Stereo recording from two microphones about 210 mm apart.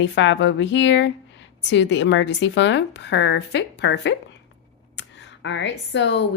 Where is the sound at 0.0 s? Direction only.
60° left (ahead or behind).